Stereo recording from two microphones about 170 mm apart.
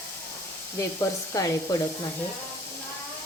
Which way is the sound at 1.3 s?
20° left (ahead or behind).